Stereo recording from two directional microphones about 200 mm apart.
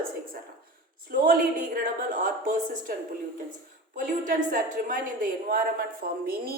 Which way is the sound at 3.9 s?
45° right (ahead or behind).